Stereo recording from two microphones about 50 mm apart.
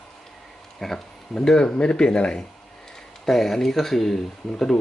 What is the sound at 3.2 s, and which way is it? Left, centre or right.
Speech, centre.